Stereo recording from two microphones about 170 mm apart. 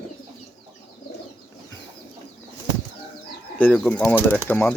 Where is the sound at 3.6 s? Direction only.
10° left (ahead or behind).